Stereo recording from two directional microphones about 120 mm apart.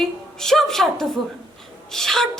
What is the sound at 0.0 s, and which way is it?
A woman's voice, 5° left (ahead or behind).